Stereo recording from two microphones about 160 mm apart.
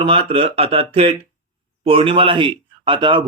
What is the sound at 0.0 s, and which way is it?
A man's voice, 35° right (ahead or behind).